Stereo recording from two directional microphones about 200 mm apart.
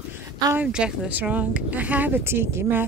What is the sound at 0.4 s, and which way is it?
Speech, 15° right (ahead or behind).